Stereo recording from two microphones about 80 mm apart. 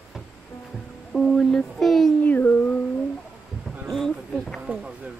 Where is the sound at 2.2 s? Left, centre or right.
Left.